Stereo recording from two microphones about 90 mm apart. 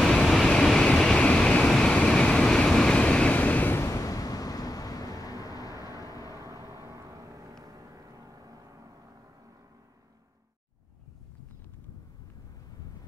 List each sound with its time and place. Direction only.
0.0 s waves: 5° left (ahead or behind); by 6.3 s 40° left (ahead or behind)
6.4 s vehicle: 35° right (ahead or behind)